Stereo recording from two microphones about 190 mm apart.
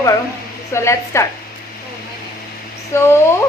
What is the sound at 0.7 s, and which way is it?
Speech, 15° left (ahead or behind).